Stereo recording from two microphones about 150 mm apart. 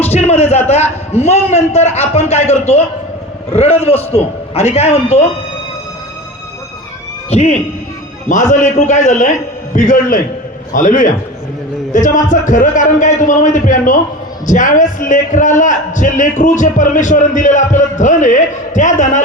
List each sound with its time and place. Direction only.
0.0 s a man's voice: 45° left (ahead or behind)
7.3 s a man's voice: 45° left (ahead or behind)